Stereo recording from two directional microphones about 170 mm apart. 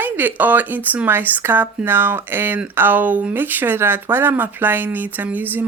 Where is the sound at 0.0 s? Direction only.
10° right (ahead or behind).